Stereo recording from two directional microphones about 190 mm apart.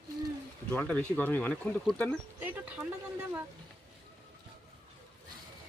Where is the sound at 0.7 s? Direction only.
10° left (ahead or behind).